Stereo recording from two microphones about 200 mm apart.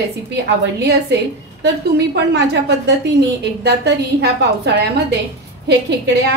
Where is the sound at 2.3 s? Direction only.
55° right (ahead or behind).